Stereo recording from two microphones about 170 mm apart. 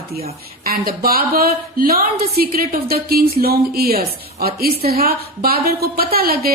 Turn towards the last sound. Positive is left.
turn(degrees=-60)  # may be behind; listen again after turning